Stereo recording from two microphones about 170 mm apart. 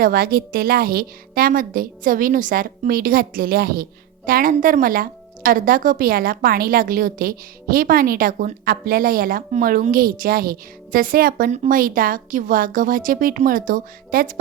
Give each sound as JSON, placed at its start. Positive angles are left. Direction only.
{"t": 0.0, "sound": "a woman's voice", "side_deg": -60}